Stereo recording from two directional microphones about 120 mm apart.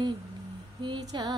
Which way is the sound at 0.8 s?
40° right (ahead or behind).